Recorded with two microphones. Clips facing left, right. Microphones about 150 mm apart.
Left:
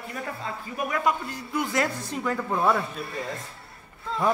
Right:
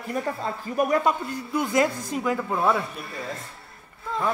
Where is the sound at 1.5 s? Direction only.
20° right (ahead or behind); by 2.8 s centre (ahead or behind).